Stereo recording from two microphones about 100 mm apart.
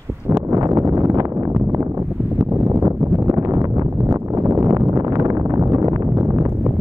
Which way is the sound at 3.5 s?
35° right (ahead or behind).